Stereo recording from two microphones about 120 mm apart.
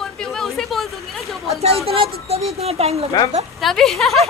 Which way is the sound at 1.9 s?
55° right (ahead or behind).